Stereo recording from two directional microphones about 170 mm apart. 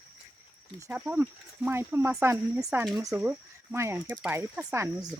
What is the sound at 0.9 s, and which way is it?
Speech, 10° right (ahead or behind).